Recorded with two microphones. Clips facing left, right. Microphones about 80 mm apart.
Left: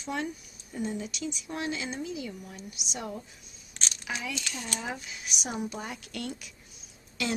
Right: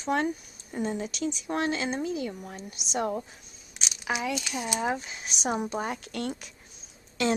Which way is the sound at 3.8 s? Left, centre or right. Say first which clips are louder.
Even; centre.